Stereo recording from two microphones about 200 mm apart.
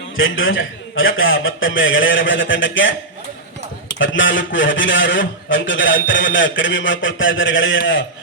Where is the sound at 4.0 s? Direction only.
70° left (ahead or behind).